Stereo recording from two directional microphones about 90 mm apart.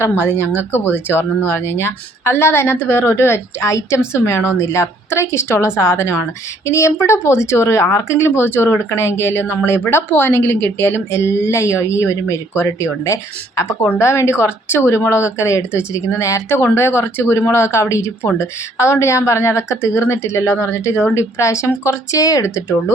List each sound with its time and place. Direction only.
0.0 s speech: 25° left (ahead or behind)